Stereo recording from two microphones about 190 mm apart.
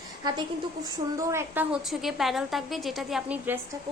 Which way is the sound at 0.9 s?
20° right (ahead or behind).